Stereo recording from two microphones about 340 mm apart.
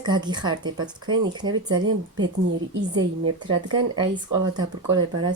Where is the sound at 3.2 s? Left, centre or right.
Right.